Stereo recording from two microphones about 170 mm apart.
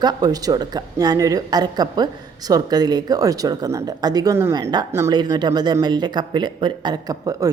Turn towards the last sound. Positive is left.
turn(degrees=-20)  # may be behind; listen again after turning